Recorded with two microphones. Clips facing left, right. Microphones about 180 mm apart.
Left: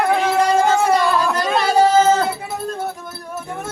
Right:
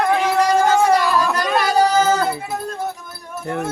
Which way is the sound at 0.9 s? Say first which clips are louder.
Even; 25° left (ahead or behind).